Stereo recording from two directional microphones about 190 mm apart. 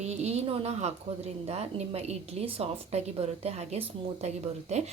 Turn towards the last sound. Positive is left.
turn(degrees=-35)  # may be behind; listen again after turning